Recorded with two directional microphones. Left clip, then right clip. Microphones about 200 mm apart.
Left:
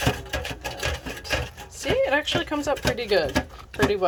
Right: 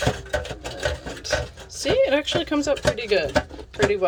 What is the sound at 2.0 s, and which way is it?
Speech, 20° right (ahead or behind).